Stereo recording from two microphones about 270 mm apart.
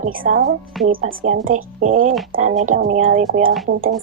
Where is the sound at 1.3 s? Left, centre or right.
Right.